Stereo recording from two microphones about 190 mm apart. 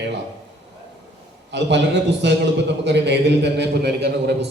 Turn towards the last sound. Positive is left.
turn(degrees=-60)  # may be behind; listen again after turning